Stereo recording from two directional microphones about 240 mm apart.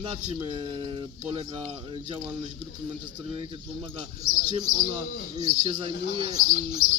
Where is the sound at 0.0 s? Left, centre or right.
Centre.